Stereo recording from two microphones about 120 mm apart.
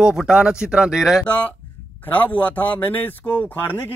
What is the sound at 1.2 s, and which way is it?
Speech, 10° left (ahead or behind).